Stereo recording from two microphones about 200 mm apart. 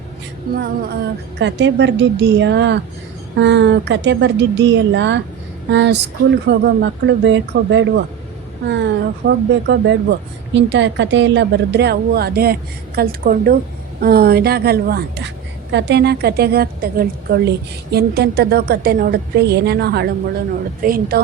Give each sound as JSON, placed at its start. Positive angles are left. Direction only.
{"t": 0.5, "sound": "a woman's voice", "side_deg": -50}
{"t": 1.4, "sound": "a woman's voice", "side_deg": -60}
{"t": 20.8, "sound": "a woman's voice", "side_deg": -45}